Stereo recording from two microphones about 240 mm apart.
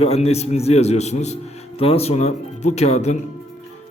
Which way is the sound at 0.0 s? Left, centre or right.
Left.